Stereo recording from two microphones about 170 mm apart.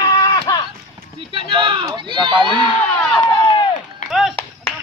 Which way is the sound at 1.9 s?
25° right (ahead or behind).